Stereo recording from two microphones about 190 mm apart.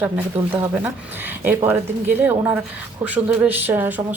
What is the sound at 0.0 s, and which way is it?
A woman's voice, 10° right (ahead or behind).